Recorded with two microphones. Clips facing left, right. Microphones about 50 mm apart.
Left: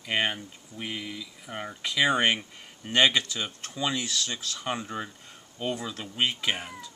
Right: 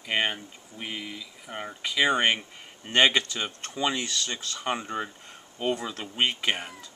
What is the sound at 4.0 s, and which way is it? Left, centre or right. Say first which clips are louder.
Speech: even; centre.